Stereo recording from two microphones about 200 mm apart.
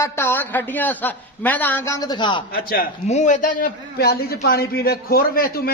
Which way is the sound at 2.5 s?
50° left (ahead or behind).